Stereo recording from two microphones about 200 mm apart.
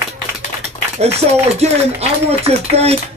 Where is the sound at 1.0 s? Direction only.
30° right (ahead or behind).